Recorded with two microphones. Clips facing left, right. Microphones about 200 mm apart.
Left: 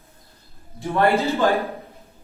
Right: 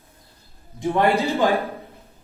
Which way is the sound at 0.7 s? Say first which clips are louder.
Even; 15° right (ahead or behind).